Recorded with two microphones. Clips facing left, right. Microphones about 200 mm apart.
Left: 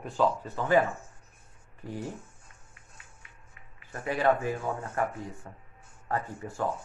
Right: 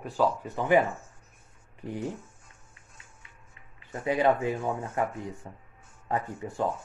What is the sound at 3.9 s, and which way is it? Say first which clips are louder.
Speech: right 2 dB; 20° right (ahead or behind).